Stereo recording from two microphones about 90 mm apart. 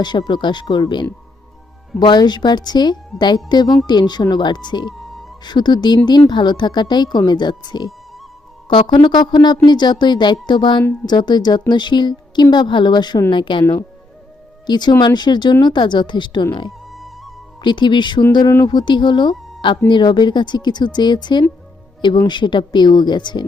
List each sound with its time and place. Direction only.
0.0 s speech: 60° left (ahead or behind)
13.3 s speech: 65° left (ahead or behind)
14.7 s speech: 55° left (ahead or behind)
16.9 s music: centre (ahead or behind)
17.6 s speech: 60° left (ahead or behind)